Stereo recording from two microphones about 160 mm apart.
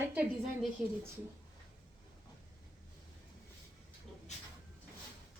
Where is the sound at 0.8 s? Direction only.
5° right (ahead or behind).